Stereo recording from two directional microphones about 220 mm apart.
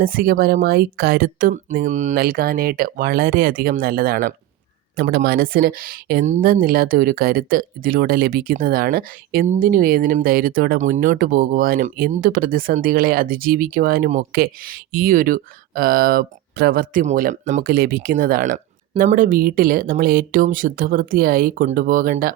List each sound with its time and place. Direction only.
0.0 s speech: 40° right (ahead or behind)